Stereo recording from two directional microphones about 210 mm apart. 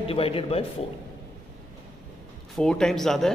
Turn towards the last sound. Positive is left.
turn(degrees=0)  # may be behind; listen again after turning